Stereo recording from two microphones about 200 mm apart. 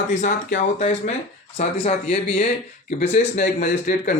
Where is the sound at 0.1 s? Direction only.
40° left (ahead or behind).